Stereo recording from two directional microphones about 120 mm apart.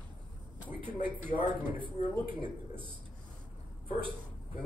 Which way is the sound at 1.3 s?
45° right (ahead or behind).